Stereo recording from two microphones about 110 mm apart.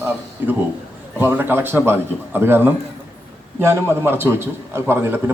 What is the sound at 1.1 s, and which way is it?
A man's voice, 20° right (ahead or behind).